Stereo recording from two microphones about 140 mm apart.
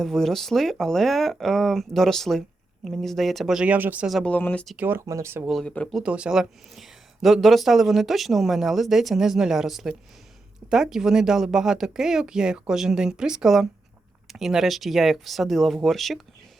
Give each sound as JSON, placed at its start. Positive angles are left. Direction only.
{"t": 0.0, "sound": "speech", "side_deg": 0}
{"t": 4.2, "sound": "speech", "side_deg": 10}
{"t": 4.8, "sound": "speech", "side_deg": -15}
{"t": 5.5, "sound": "speech", "side_deg": 5}
{"t": 6.0, "sound": "speech", "side_deg": -5}